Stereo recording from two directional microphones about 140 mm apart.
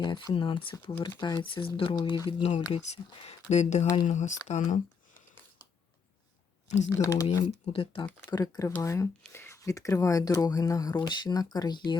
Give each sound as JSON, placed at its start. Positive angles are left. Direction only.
{"t": 0.0, "sound": "speech", "side_deg": 30}
{"t": 3.5, "sound": "speech", "side_deg": 55}
{"t": 6.7, "sound": "speech", "side_deg": 55}
{"t": 6.9, "sound": "speech", "side_deg": 25}
{"t": 7.6, "sound": "speech", "side_deg": 40}